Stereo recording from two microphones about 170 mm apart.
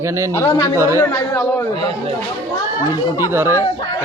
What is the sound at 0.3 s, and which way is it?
Speech, 15° left (ahead or behind).